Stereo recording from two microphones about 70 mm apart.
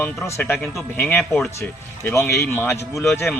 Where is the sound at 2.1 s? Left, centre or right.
Left.